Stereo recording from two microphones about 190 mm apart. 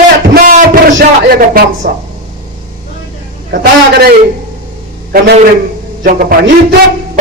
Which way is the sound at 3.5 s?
55° right (ahead or behind).